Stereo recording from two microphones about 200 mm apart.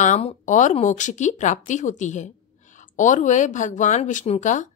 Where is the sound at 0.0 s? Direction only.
35° left (ahead or behind).